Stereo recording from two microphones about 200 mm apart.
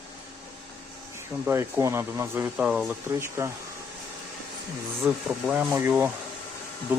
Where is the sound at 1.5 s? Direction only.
15° right (ahead or behind).